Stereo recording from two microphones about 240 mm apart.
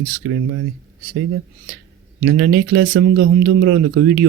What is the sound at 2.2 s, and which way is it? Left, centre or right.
Speech, right.